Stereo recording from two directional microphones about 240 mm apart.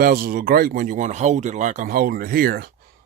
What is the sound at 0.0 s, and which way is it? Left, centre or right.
Speech, right.